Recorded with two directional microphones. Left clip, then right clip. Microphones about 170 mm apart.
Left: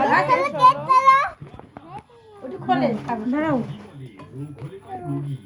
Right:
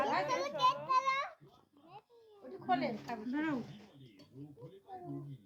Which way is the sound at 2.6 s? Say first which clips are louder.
Left 14 dB; 15° left (ahead or behind).